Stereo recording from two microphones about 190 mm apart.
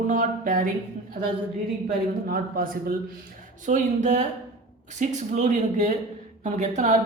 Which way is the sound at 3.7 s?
40° right (ahead or behind).